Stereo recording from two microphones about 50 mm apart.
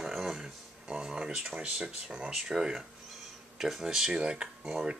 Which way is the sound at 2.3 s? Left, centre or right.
Centre.